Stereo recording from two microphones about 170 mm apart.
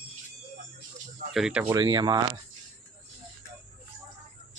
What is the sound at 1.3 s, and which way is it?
Speech, 5° right (ahead or behind).